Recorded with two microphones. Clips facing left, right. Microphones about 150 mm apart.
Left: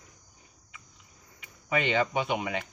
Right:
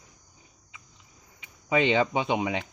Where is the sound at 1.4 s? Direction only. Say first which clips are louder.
Right 5 dB; 20° right (ahead or behind).